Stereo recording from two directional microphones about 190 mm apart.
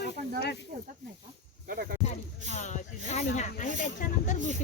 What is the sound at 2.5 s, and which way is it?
Speech, 40° left (ahead or behind).